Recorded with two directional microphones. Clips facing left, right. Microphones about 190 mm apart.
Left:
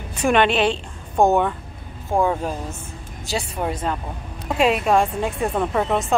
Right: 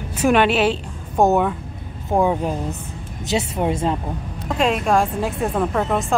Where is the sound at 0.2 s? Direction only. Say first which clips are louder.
Right 1 dB; 5° right (ahead or behind).